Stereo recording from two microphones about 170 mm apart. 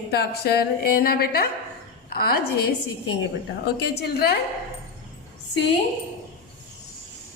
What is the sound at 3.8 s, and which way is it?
Speech, 70° left (ahead or behind).